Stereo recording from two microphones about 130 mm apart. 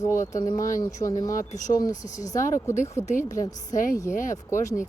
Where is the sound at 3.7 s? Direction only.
90° left; by 4.7 s 75° left (ahead or behind).